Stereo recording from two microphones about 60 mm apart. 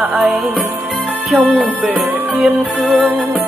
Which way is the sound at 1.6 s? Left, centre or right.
Right.